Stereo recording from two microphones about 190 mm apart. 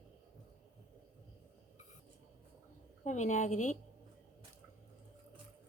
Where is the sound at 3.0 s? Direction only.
40° left (ahead or behind).